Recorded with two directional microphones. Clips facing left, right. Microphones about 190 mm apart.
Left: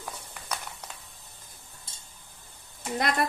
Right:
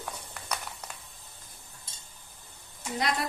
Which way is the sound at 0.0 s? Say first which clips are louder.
Right 1 dB; centre (ahead or behind).